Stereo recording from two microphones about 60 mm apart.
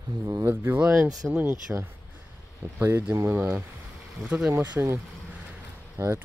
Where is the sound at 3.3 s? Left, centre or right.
Right.